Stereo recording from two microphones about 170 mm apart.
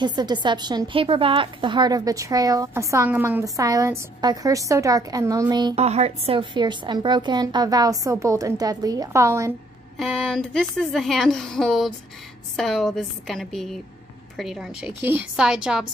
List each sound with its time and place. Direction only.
0.0 s a woman's voice: 25° right (ahead or behind)
5.8 s a woman's voice: 40° right (ahead or behind); by 9.5 s 15° right (ahead or behind)
9.9 s speech: centre (ahead or behind)
15.0 s speech: 10° right (ahead or behind)